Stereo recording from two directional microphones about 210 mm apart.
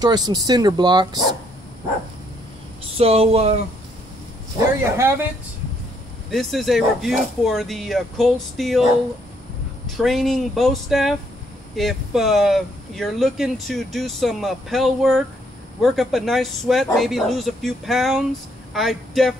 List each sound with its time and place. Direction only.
0.0 s speech: 20° right (ahead or behind)
3.0 s speech: 30° right (ahead or behind)
4.9 s speech: 10° right (ahead or behind)
6.3 s speech: centre (ahead or behind)
9.8 s speech: centre (ahead or behind)